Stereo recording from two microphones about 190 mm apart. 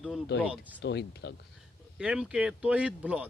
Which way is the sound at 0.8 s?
65° left (ahead or behind).